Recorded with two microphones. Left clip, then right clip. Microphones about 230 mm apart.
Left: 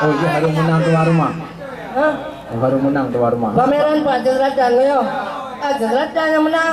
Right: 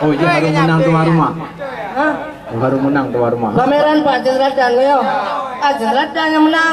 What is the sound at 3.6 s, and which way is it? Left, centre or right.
A man's voice, centre.